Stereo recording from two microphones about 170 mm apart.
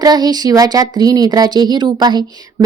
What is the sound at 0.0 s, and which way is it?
Speech, 25° right (ahead or behind).